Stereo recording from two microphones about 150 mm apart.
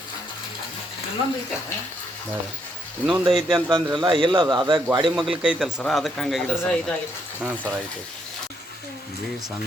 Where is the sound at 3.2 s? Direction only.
30° right (ahead or behind).